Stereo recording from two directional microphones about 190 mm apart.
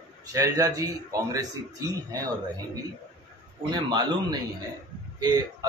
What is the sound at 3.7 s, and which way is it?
Speech, 20° right (ahead or behind).